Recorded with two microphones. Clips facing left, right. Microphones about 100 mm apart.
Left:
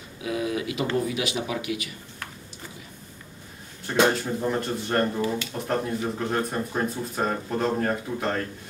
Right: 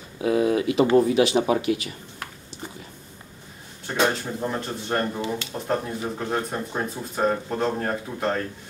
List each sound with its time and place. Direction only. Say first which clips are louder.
0.2 s speech: right 7 dB; 35° right (ahead or behind)
3.8 s speech: left 2 dB; centre (ahead or behind)